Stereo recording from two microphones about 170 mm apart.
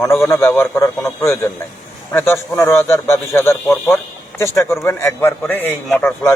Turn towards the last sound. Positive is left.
turn(degrees=5)  # may be behind; listen again after turning